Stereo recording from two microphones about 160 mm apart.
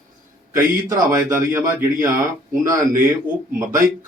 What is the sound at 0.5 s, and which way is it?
A man's voice, 20° right (ahead or behind).